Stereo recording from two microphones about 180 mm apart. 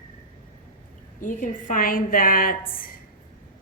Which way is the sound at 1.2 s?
45° left (ahead or behind).